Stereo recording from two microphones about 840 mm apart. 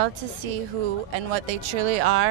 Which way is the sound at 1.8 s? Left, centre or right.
Right.